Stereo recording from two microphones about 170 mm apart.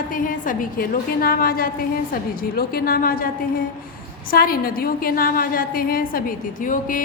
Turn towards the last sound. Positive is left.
turn(degrees=50)  # may be behind; listen again after turning